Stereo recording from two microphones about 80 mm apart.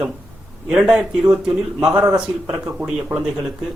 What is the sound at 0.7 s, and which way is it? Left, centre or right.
A man's voice, centre.